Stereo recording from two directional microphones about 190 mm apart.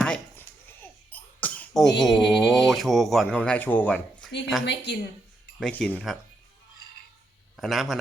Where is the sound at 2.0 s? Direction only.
Centre (ahead or behind).